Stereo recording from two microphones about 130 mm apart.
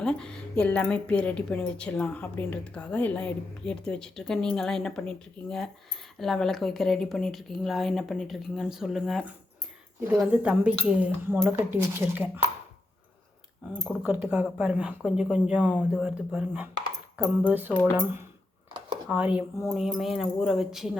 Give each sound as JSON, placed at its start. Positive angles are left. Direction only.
{"t": 0.0, "sound": "speech", "side_deg": 5}
{"t": 14.0, "sound": "speech", "side_deg": -10}
{"t": 17.7, "sound": "speech", "side_deg": 15}
{"t": 17.9, "sound": "speech", "side_deg": -15}